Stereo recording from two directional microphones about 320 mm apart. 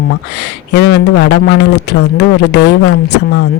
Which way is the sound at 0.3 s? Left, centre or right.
Left.